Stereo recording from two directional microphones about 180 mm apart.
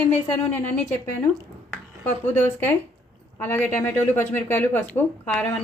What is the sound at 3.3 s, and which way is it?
A woman's voice, 10° left (ahead or behind).